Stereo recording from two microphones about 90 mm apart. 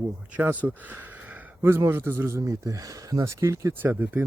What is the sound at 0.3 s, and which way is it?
Speech, 20° right (ahead or behind).